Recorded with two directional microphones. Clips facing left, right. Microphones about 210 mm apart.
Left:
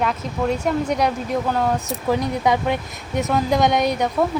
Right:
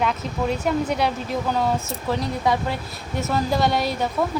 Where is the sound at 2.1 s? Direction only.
20° left (ahead or behind).